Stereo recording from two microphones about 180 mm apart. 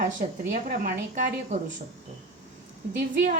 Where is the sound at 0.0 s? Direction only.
55° right (ahead or behind).